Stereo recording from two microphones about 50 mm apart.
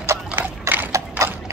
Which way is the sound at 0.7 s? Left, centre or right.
Right.